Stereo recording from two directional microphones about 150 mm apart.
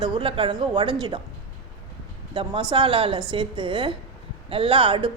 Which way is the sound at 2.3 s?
35° right (ahead or behind).